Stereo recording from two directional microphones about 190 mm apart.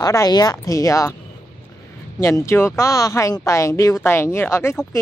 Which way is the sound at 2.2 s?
15° left (ahead or behind).